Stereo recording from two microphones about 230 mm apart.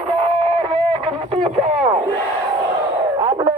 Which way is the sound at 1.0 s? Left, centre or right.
Right.